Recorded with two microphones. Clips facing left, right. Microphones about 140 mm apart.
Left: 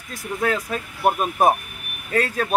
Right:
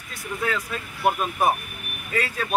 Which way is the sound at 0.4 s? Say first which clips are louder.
Left 4 dB; 45° left (ahead or behind).